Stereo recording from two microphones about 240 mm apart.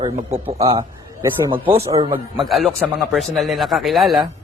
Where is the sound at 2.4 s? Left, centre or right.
Centre.